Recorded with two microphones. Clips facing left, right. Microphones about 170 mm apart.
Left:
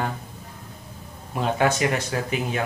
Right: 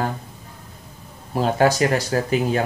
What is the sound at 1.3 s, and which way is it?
Speech, 35° right (ahead or behind).